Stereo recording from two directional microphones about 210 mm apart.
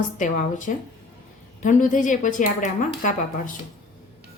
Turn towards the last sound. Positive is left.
turn(degrees=35)  # may be behind; listen again after turning